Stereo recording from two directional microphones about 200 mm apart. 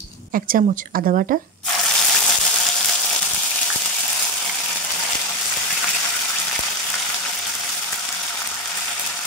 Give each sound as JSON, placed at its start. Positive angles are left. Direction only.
{"t": 0.3, "sound": "speech", "side_deg": -45}